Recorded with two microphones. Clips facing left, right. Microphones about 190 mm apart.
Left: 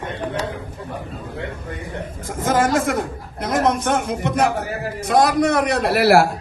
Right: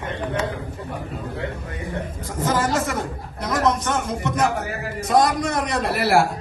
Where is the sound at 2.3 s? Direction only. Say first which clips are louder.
Left 4 dB; 50° left (ahead or behind).